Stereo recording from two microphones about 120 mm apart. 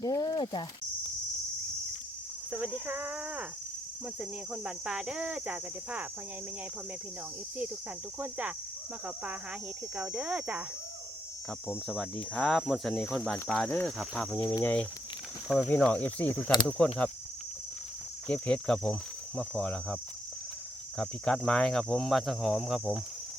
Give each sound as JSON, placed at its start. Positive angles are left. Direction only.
{"t": 0.0, "sound": "a sound", "side_deg": 30}
{"t": 2.5, "sound": "cricket", "side_deg": -15}
{"t": 8.2, "sound": "cricket", "side_deg": -10}
{"t": 9.9, "sound": "cricket", "side_deg": -5}
{"t": 11.9, "sound": "speech", "side_deg": 10}
{"t": 12.9, "sound": "speech", "side_deg": 15}
{"t": 13.1, "sound": "speech", "side_deg": 0}
{"t": 18.3, "sound": "speech", "side_deg": 5}
{"t": 21.0, "sound": "speech", "side_deg": 5}